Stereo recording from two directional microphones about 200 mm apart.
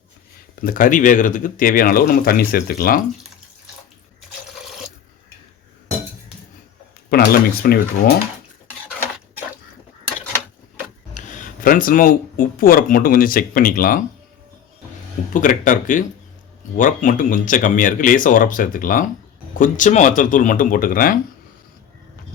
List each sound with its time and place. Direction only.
0.6 s speech: 45° left (ahead or behind)
7.1 s speech: 50° left (ahead or behind)
11.1 s speech: 40° left (ahead or behind)
15.3 s speech: 40° left (ahead or behind)